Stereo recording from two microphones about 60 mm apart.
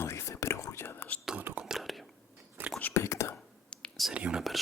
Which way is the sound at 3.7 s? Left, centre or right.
Centre.